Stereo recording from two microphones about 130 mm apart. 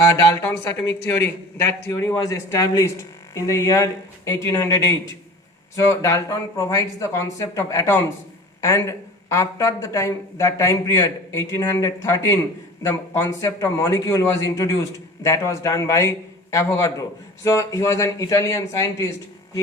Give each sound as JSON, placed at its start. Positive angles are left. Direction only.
{"t": 0.4, "sound": "a woman's voice", "side_deg": 15}